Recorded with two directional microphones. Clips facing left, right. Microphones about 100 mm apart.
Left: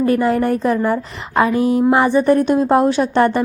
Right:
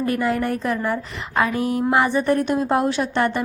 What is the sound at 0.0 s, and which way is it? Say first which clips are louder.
A woman's voice: left 6 dB; 30° left (ahead or behind).